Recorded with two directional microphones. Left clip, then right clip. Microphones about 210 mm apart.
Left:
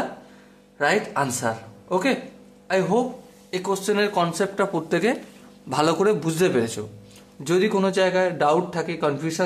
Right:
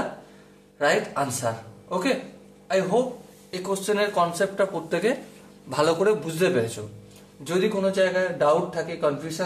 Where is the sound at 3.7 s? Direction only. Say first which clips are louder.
Left 1 dB; 35° left (ahead or behind).